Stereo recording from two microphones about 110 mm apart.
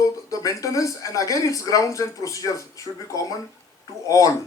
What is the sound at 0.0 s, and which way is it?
Speech, 30° left (ahead or behind).